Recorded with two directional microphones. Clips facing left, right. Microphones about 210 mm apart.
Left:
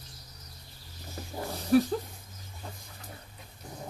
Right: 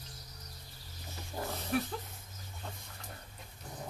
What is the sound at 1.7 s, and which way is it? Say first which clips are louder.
Speech: left 12 dB; 35° left (ahead or behind).